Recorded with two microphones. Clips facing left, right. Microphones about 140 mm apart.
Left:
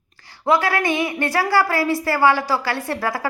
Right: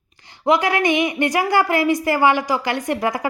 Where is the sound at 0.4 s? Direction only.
20° right (ahead or behind).